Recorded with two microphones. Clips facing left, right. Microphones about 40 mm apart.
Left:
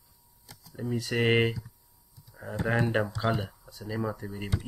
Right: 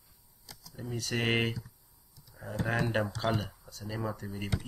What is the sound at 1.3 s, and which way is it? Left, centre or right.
Speech, centre.